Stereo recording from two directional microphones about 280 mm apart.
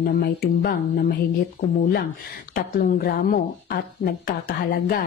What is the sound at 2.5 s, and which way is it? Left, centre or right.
Speech, left.